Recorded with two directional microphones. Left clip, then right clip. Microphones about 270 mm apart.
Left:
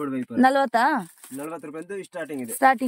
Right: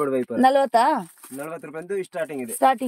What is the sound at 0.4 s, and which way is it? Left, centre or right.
Speech, centre.